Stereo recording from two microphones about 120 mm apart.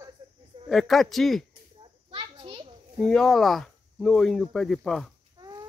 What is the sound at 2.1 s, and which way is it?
Children playing, 40° right (ahead or behind).